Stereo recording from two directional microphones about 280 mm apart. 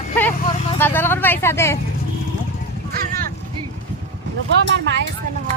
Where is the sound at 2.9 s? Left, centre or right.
Right.